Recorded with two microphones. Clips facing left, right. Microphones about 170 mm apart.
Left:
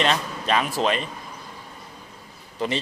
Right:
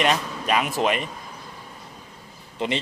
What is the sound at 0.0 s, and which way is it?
Speech, 10° right (ahead or behind).